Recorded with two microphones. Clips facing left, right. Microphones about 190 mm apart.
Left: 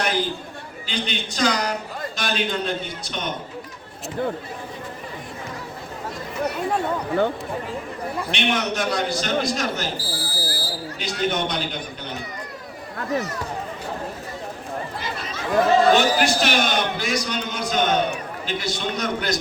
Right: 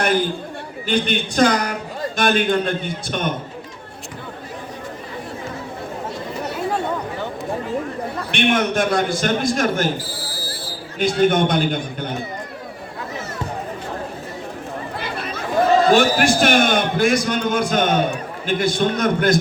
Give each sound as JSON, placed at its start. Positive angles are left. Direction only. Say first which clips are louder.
{"t": 0.0, "sound": "chatter", "louder": "right 5 dB", "side_deg": -55}
{"t": 0.9, "sound": "a man's voice", "louder": "right 8 dB", "side_deg": -55}
{"t": 8.3, "sound": "a man's voice", "louder": "right 6 dB", "side_deg": -50}
{"t": 10.0, "sound": "a sound", "louder": "left 1 dB", "side_deg": 30}
{"t": 11.2, "sound": "a man's voice", "louder": "right 7 dB", "side_deg": -50}
{"t": 15.0, "sound": "chatter", "louder": "right 4 dB", "side_deg": -60}
{"t": 16.0, "sound": "a man's voice", "louder": "right 4 dB", "side_deg": -50}